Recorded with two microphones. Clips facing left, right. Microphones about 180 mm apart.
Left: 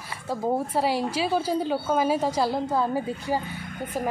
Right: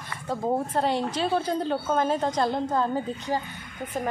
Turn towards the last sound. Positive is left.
turn(degrees=10)  # may be behind; listen again after turning